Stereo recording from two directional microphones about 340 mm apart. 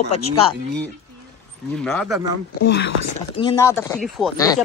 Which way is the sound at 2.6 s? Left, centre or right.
Left.